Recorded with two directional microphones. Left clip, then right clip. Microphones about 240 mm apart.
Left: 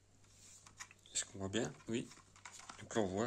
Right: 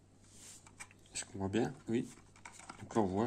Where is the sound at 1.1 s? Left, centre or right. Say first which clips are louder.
Right 3 dB; centre.